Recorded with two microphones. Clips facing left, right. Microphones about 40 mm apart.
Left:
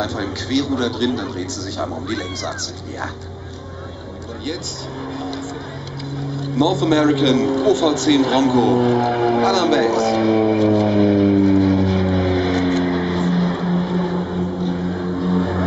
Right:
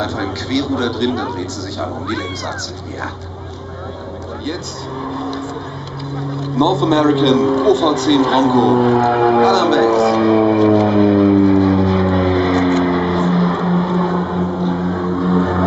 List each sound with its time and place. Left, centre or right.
0.0 s a man's voice: right
6.6 s a man's voice: centre
9.5 s a man's voice: right
10.1 s vehicle: centre; by 14.6 s right
14.6 s a sound: centre